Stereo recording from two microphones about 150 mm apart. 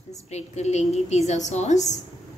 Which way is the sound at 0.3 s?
50° left (ahead or behind).